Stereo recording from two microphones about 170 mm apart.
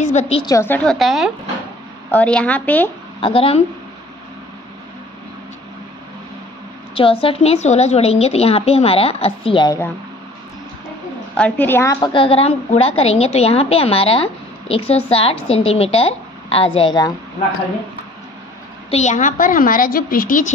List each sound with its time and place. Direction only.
0.0 s a woman's voice: 40° left (ahead or behind)
0.5 s a woman's voice: 15° left (ahead or behind)
3.2 s a woman's voice: 30° left (ahead or behind)
7.0 s a woman's voice: 30° left (ahead or behind)
11.3 s a woman's voice: 10° left (ahead or behind); by 17.1 s 25° left (ahead or behind)
18.9 s a woman's voice: 40° left (ahead or behind)